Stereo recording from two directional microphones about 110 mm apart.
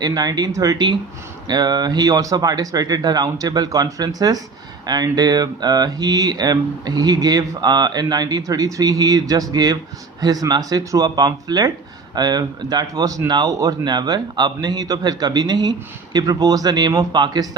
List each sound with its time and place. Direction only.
0.0 s speech: 35° right (ahead or behind)